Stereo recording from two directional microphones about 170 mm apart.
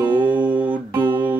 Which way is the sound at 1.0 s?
25° right (ahead or behind).